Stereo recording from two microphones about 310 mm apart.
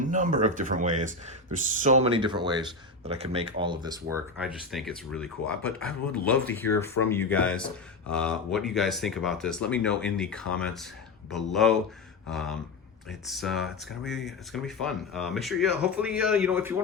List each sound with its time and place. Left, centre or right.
0.0 s speech: right
4.7 s speech: centre